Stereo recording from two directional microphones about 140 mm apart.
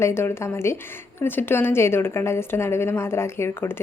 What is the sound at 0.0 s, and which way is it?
A woman's voice, 20° left (ahead or behind).